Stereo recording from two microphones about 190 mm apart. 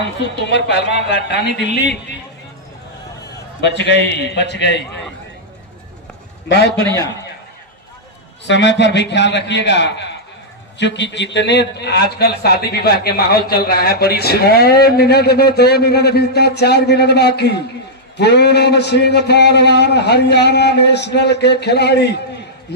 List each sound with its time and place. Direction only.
0.2 s a man's voice: 65° left (ahead or behind)
3.6 s a man's voice: 65° left (ahead or behind)
6.7 s a man's voice: 10° left (ahead or behind)
8.4 s a man's voice: 65° left (ahead or behind)